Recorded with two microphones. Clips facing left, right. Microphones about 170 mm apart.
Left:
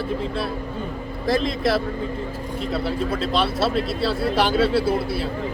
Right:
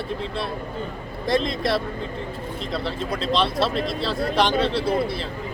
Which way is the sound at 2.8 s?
5° left (ahead or behind).